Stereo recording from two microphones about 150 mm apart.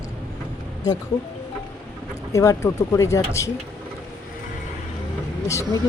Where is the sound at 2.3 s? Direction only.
20° left (ahead or behind).